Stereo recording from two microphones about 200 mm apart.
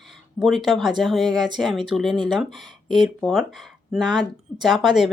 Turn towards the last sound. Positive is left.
turn(degrees=0)  # may be behind; listen again after turning